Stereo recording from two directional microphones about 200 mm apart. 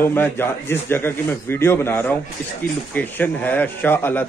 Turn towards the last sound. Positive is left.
turn(degrees=10)  # may be behind; listen again after turning